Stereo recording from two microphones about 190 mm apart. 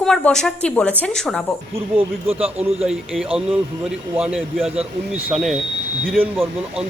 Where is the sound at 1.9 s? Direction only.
30° right (ahead or behind).